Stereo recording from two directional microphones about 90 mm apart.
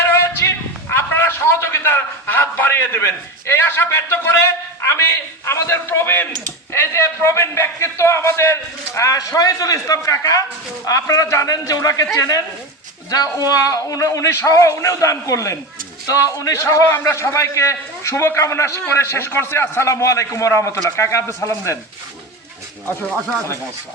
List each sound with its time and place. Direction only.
0.0 s a man's voice: 30° left (ahead or behind)